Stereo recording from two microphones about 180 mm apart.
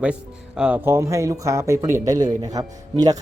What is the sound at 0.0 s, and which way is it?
A man's voice, 5° right (ahead or behind).